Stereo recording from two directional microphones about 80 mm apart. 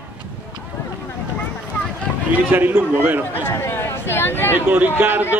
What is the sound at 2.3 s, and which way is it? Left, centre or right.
Speech, right.